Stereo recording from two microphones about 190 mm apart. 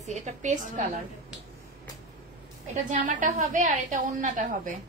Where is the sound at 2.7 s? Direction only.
40° right (ahead or behind).